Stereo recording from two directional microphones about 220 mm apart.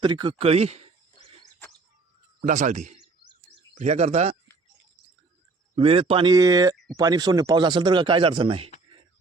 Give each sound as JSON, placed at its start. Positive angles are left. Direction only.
{"t": 0.0, "sound": "speech", "side_deg": -20}
{"t": 2.4, "sound": "speech", "side_deg": -35}
{"t": 5.7, "sound": "speech", "side_deg": -25}